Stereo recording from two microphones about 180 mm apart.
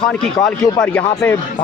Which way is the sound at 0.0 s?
5° left (ahead or behind).